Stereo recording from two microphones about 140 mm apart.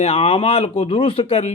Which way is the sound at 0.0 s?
45° left (ahead or behind).